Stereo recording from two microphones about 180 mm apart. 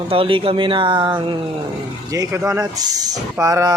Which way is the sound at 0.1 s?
30° right (ahead or behind).